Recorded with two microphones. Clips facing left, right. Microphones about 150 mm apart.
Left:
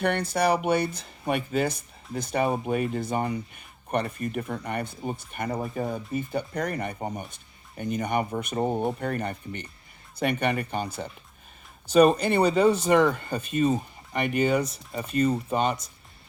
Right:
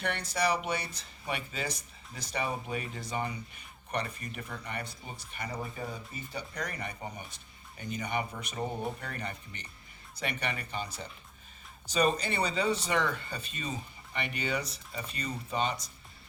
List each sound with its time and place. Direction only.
0.0 s speech: 55° left (ahead or behind)